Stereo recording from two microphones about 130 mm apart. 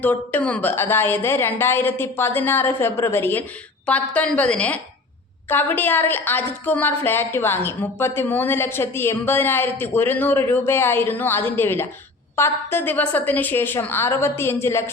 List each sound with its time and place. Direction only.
0.0 s a woman's voice: 15° left (ahead or behind)